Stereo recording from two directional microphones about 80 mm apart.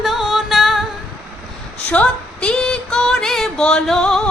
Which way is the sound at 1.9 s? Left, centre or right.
Centre.